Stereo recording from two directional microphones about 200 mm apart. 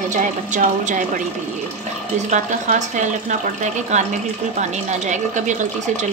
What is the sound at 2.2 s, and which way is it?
A woman's voice, 35° right (ahead or behind).